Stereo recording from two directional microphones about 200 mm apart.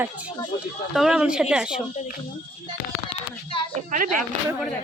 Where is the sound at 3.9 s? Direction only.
40° right (ahead or behind).